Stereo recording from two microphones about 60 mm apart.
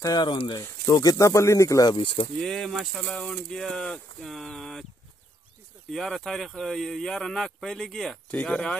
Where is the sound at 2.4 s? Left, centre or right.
Centre.